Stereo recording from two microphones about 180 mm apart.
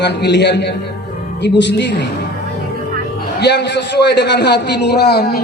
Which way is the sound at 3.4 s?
70° left (ahead or behind).